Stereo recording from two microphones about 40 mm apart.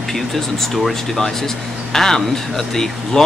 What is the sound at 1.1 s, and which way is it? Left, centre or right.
Speech, centre.